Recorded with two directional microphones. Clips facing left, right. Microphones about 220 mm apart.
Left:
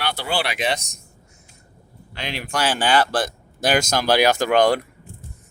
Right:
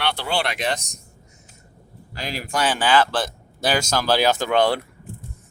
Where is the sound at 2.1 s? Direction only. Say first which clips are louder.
Even; centre (ahead or behind).